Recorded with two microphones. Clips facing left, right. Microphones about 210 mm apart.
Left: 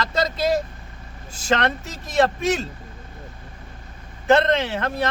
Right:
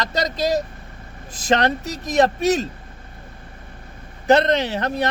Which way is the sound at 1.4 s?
35° right (ahead or behind).